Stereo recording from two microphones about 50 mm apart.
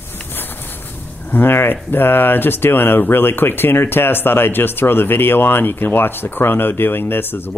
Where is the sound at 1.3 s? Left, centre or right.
Left.